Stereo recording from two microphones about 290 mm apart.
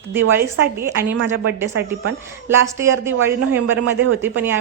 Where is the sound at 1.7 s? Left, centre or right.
Right.